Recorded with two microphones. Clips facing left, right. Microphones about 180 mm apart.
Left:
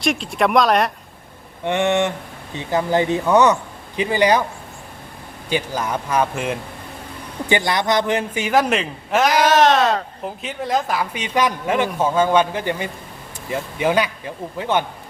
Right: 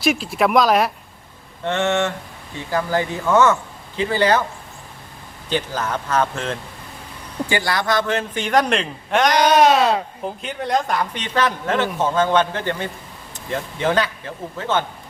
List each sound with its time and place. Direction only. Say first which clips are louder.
0.0 s speech: right 1 dB; 5° right (ahead or behind)
1.6 s speech: left 2 dB; 15° left (ahead or behind)
5.5 s speech: left 1 dB; 10° left (ahead or behind)